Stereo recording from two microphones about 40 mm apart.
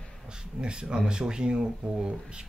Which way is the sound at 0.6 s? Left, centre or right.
Right.